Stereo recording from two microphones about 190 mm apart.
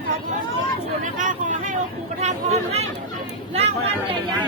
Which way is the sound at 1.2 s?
45° right (ahead or behind).